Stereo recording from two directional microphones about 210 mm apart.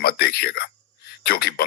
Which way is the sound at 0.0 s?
50° left (ahead or behind).